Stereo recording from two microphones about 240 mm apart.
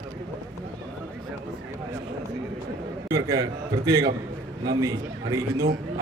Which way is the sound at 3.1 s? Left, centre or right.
Centre.